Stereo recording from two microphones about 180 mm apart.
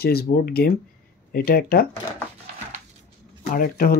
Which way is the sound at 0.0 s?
60° left (ahead or behind).